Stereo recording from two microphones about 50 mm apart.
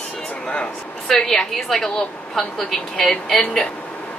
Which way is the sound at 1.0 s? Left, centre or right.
Centre.